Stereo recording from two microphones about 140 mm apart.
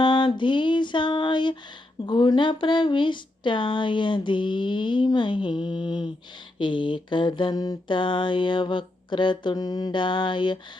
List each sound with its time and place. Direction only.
0.0 s music: 35° left (ahead or behind)
2.0 s speech: 30° left (ahead or behind)